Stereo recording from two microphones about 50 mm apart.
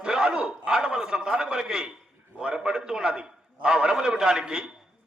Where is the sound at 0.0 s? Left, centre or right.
Centre.